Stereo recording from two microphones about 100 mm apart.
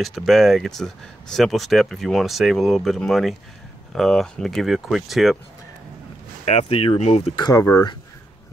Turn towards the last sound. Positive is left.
turn(degrees=40)  # may be behind; listen again after turning